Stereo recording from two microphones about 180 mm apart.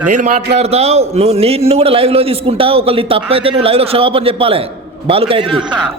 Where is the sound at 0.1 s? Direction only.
40° right (ahead or behind).